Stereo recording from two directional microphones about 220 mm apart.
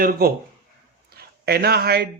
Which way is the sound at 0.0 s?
40° right (ahead or behind).